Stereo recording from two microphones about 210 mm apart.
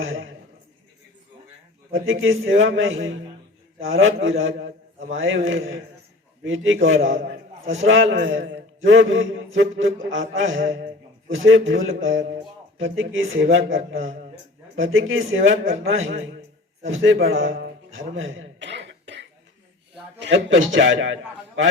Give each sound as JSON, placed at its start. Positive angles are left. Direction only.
{"t": 0.0, "sound": "a man's voice", "side_deg": -70}
{"t": 2.2, "sound": "a man's voice", "side_deg": -70}
{"t": 16.8, "sound": "a sound", "side_deg": -65}
{"t": 20.1, "sound": "a man's voice", "side_deg": -60}